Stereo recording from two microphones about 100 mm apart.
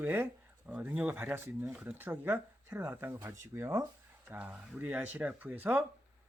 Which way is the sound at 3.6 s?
25° right (ahead or behind).